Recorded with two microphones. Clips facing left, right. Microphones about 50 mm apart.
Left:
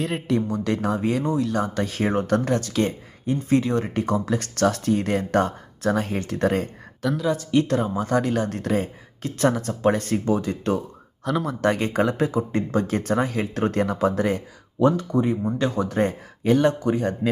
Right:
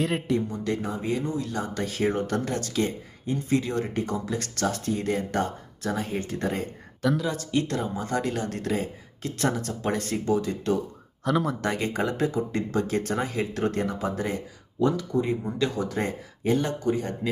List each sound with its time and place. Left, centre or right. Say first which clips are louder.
0.0 s speech: even; centre
0.3 s speech: left 4 dB; left
7.0 s speech: even; centre
7.7 s speech: left 6 dB; left
11.2 s speech: even; centre
11.6 s speech: left 6 dB; left
15.5 s speech: left 4 dB; left